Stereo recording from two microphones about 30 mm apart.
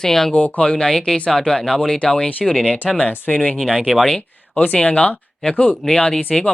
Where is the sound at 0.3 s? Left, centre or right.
Left.